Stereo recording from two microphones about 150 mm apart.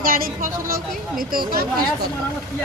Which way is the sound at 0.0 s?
70° right (ahead or behind).